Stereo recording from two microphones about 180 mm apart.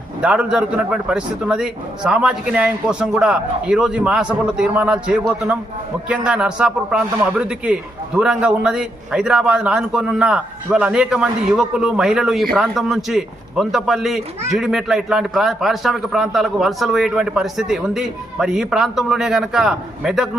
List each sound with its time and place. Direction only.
0.2 s a man's voice: 5° right (ahead or behind)